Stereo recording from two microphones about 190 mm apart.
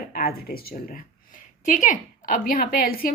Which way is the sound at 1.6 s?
45° left (ahead or behind).